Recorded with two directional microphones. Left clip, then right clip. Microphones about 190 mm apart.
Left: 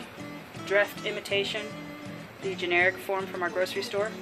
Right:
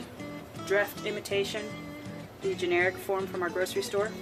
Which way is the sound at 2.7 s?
20° right (ahead or behind).